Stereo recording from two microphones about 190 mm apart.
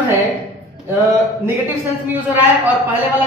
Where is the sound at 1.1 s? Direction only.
10° right (ahead or behind).